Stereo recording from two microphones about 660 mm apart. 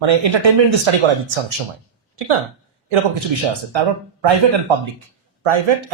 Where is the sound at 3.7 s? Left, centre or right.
Right.